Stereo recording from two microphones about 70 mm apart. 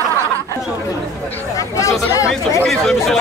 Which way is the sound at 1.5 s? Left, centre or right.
Left.